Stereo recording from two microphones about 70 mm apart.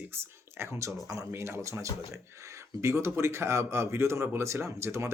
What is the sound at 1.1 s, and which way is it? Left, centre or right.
Speech, right.